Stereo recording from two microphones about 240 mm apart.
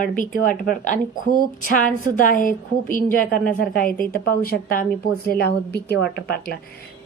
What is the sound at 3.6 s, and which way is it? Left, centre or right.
Speech, left.